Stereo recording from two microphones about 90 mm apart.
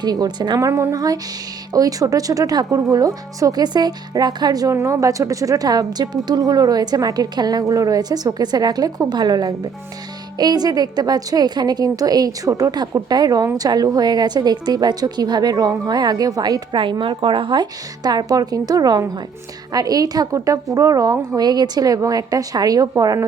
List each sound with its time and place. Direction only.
0.0 s a woman's voice: 50° right (ahead or behind)
0.6 s a woman's voice: 35° right (ahead or behind)
0.9 s a woman's voice: 45° right (ahead or behind)
4.7 s a woman's voice: 35° right (ahead or behind)
16.7 s a woman's voice: 65° right (ahead or behind); by 23.2 s 40° right (ahead or behind)